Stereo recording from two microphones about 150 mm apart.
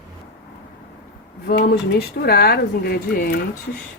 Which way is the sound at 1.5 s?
90° left.